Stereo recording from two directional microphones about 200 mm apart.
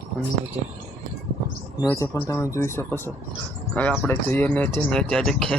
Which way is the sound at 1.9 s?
10° left (ahead or behind).